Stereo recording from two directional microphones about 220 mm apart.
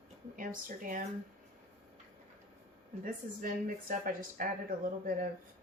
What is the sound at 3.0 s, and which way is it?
Speech, 40° right (ahead or behind).